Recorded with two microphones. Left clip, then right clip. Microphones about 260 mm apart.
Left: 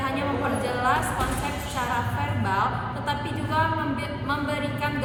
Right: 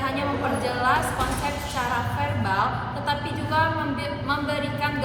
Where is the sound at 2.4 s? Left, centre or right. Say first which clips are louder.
Even; centre.